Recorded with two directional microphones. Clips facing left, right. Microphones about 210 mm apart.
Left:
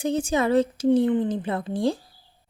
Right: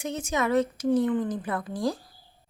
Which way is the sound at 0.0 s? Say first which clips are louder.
Left 5 dB; 30° left (ahead or behind).